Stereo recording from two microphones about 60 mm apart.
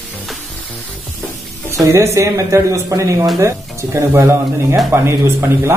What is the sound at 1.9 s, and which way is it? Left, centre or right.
Speech, right.